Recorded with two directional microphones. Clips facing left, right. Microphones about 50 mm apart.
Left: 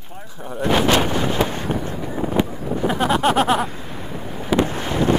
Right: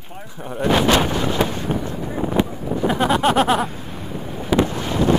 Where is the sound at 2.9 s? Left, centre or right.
Centre.